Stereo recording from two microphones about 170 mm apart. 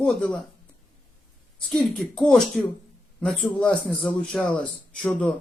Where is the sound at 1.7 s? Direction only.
5° left (ahead or behind).